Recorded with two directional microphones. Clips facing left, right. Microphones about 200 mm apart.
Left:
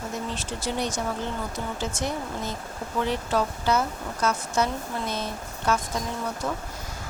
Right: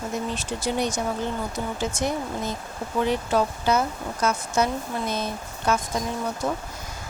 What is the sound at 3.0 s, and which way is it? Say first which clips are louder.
Speech: right 3 dB; 15° right (ahead or behind).